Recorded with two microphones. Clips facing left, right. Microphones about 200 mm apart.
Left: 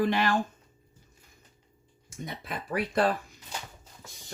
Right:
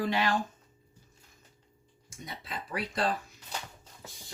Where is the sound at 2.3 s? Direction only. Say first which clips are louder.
Left 4 dB; 55° left (ahead or behind).